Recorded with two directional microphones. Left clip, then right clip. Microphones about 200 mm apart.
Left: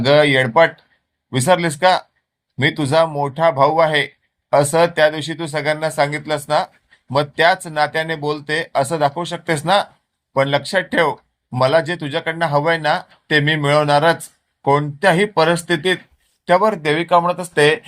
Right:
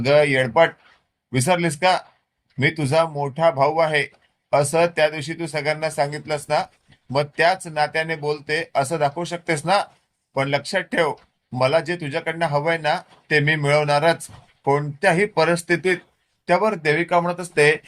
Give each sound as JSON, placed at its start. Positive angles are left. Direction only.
{"t": 0.0, "sound": "speech", "side_deg": 15}